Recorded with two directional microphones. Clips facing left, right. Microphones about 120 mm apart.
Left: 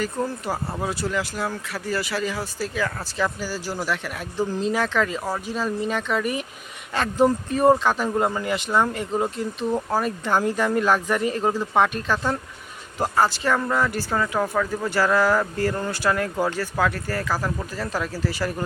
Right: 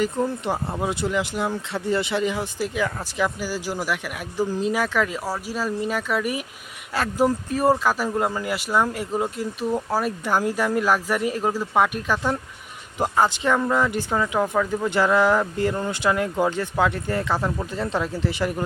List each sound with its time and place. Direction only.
0.4 s speech: 20° right (ahead or behind)